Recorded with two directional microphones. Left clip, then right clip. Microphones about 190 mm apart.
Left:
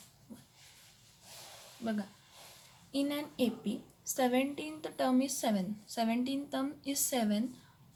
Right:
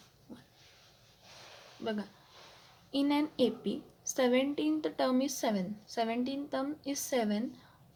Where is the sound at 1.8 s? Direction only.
30° right (ahead or behind).